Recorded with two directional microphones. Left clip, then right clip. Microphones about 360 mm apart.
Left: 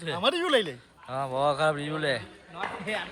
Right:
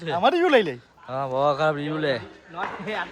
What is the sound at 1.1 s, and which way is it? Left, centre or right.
Speech, centre.